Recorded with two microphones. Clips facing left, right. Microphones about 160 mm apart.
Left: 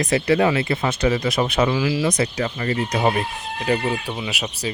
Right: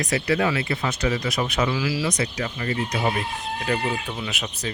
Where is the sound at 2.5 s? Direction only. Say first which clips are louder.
Left 2 dB; 45° left (ahead or behind).